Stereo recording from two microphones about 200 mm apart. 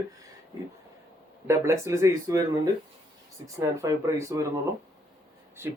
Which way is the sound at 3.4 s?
15° right (ahead or behind).